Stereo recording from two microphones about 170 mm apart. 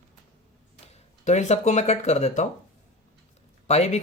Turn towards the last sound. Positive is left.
turn(degrees=40)  # may be behind; listen again after turning